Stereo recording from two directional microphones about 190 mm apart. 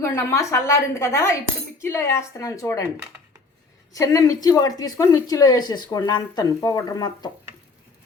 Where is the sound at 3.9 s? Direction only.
15° left (ahead or behind).